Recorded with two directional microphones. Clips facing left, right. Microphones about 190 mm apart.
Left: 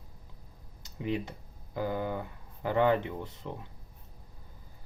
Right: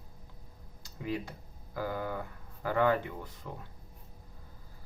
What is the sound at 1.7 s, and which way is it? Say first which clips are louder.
Speech: left 3 dB; 20° left (ahead or behind).